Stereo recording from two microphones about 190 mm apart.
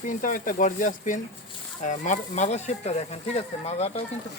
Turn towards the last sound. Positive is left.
turn(degrees=30)  # may be behind; listen again after turning